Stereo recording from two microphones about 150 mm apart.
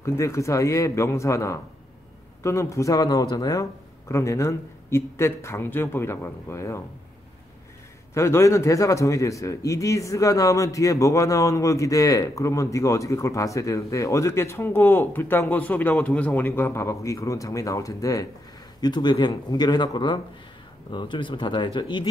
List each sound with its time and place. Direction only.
0.0 s a man's voice: 20° left (ahead or behind)
8.1 s a man's voice: 20° left (ahead or behind)